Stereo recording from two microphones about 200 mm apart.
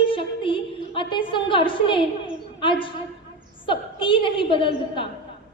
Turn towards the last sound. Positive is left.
turn(degrees=25)  # may be behind; listen again after turning